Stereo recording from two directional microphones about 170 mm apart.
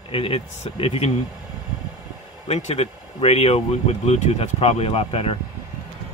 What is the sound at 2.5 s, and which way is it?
Speech, 40° left (ahead or behind).